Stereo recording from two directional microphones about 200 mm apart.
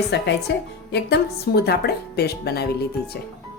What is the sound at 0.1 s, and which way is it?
A woman's voice, 60° left (ahead or behind).